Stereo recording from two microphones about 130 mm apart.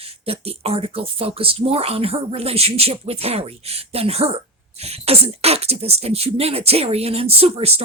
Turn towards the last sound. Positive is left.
turn(degrees=-50)  # may be behind; listen again after turning